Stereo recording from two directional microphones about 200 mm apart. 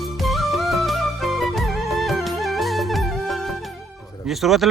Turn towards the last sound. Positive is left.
turn(degrees=0)  # may be behind; listen again after turning